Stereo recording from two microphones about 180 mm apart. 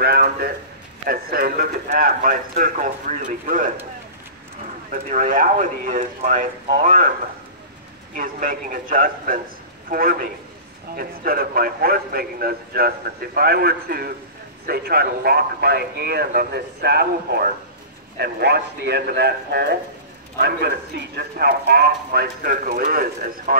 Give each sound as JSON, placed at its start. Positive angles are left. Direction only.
{"t": 0.0, "sound": "a man's voice", "side_deg": -60}
{"t": 5.1, "sound": "a man's voice", "side_deg": -50}
{"t": 8.2, "sound": "a man's voice", "side_deg": -50}